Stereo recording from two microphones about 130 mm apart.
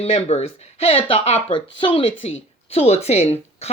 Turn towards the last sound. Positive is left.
turn(degrees=50)  # may be behind; listen again after turning